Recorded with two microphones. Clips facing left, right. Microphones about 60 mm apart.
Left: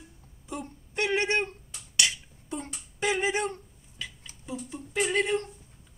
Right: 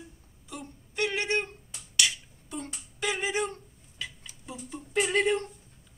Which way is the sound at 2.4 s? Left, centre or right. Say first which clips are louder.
Left 2 dB; left.